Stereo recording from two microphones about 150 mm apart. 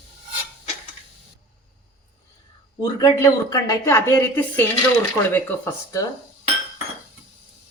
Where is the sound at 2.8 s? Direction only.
25° left (ahead or behind).